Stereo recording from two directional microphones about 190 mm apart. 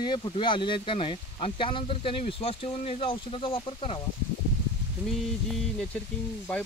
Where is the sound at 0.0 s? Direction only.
25° left (ahead or behind).